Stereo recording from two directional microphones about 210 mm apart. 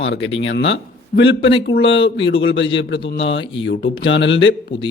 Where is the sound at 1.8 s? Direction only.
25° left (ahead or behind).